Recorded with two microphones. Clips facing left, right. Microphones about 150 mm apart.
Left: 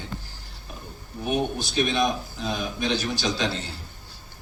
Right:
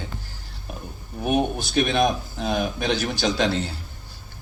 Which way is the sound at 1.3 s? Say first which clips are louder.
Right 3 dB; 55° right (ahead or behind).